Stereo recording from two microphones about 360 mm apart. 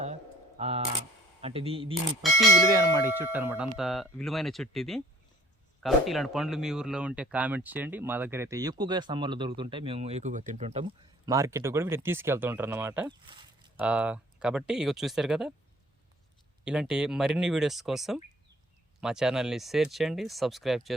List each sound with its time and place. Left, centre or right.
0.0 s a sound: centre
1.4 s speech: centre
16.6 s speech: centre